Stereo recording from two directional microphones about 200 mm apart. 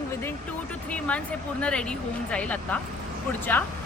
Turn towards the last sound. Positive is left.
turn(degrees=10)  # may be behind; listen again after turning